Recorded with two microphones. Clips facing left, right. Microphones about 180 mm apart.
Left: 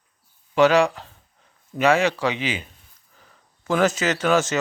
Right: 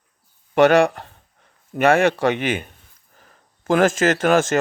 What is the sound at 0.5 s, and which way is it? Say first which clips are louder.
Speech: right 3 dB; 55° right (ahead or behind).